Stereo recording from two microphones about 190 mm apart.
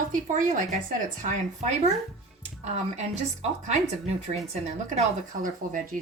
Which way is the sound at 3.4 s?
35° right (ahead or behind).